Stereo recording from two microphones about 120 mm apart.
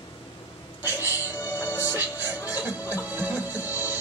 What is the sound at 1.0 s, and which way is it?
Music, 25° left (ahead or behind).